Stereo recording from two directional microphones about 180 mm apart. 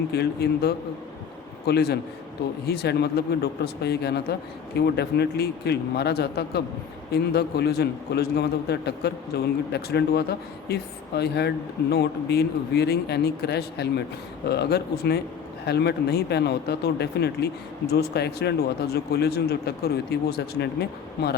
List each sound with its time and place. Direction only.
0.1 s a man's voice: 65° left (ahead or behind)